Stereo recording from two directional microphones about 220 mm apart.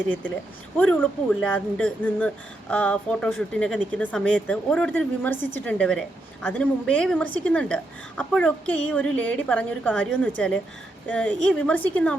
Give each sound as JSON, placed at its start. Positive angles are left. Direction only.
{"t": 0.8, "sound": "a woman's voice", "side_deg": 5}